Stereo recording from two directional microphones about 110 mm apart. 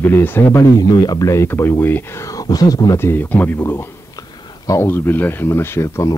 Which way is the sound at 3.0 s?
20° left (ahead or behind).